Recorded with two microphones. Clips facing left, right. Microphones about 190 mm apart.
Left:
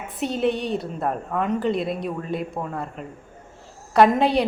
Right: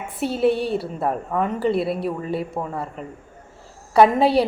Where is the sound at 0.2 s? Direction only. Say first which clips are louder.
Right 3 dB; 5° right (ahead or behind).